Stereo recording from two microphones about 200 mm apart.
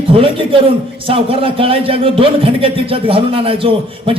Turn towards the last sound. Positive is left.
turn(degrees=-25)  # may be behind; listen again after turning